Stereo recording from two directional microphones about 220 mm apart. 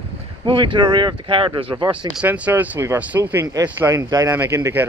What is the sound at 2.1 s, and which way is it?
Speech, 5° right (ahead or behind).